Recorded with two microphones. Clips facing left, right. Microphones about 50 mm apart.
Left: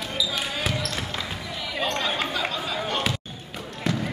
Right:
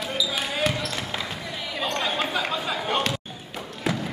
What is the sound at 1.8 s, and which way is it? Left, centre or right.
Chatter, centre.